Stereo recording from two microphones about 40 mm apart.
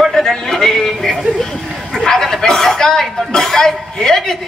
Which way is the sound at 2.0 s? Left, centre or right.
Centre.